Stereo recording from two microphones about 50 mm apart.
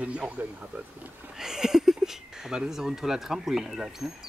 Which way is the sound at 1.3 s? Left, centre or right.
Centre.